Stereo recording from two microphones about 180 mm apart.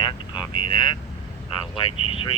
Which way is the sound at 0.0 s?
25° left (ahead or behind).